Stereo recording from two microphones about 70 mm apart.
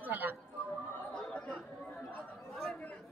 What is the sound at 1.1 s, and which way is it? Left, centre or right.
Chatter, centre.